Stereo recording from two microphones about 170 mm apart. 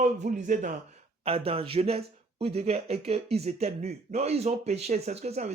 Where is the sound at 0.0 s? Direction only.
45° right (ahead or behind).